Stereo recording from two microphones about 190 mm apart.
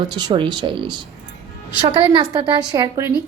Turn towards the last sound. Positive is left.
turn(degrees=-20)  # may be behind; listen again after turning